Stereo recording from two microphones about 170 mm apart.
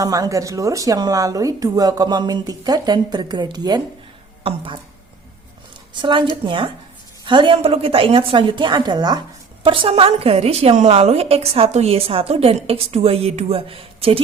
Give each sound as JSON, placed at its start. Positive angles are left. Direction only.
{"t": 0.0, "sound": "a woman's voice", "side_deg": -20}
{"t": 5.9, "sound": "a woman's voice", "side_deg": -25}